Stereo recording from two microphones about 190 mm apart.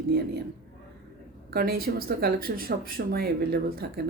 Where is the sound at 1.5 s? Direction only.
50° right (ahead or behind).